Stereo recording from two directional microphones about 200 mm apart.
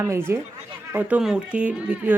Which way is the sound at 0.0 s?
10° right (ahead or behind).